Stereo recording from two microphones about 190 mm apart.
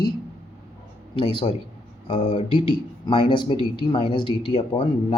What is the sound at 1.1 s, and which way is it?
Speech, 25° left (ahead or behind).